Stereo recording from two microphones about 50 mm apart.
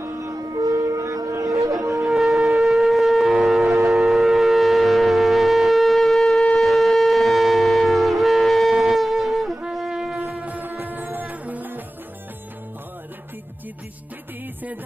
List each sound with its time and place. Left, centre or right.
0.0 s music: right
0.8 s shofar: right
2.0 s shofar: centre
9.8 s shofar: centre
10.4 s music: right